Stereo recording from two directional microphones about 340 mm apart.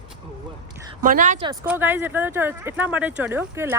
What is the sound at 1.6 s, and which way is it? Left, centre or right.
Speech, centre.